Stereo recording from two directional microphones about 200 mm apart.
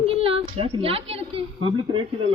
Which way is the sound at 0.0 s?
30° right (ahead or behind).